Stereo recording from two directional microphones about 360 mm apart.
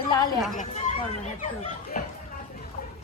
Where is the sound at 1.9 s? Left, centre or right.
Left.